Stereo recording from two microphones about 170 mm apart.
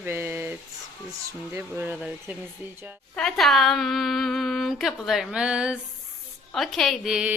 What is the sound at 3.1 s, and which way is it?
Speech, 5° left (ahead or behind).